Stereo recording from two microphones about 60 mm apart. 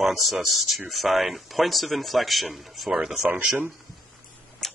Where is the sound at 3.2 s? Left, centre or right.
Right.